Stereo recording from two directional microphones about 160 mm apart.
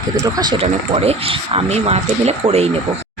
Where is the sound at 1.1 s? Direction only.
40° right (ahead or behind).